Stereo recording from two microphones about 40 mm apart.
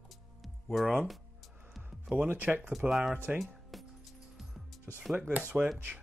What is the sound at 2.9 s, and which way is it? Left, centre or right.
Speech, centre.